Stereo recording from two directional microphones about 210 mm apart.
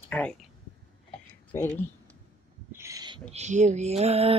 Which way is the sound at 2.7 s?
15° right (ahead or behind).